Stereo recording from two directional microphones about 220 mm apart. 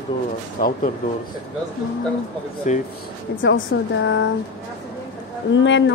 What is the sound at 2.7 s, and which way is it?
Speech, 35° left (ahead or behind).